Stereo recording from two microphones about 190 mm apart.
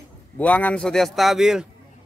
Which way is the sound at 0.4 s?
10° left (ahead or behind).